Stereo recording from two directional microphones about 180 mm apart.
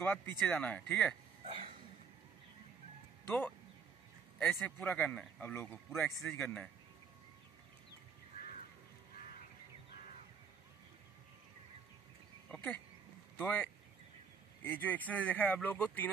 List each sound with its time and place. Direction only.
0.5 s speech: 5° left (ahead or behind)
1.4 s a sound: 30° right (ahead or behind)
3.3 s speech: 10° left (ahead or behind)
12.4 s speech: 5° left (ahead or behind)